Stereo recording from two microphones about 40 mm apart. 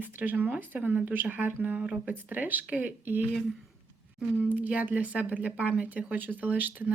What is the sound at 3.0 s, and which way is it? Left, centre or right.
Speech, right.